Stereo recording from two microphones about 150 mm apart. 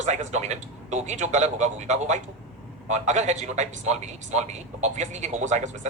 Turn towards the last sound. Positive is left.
turn(degrees=-50)  # may be behind; listen again after turning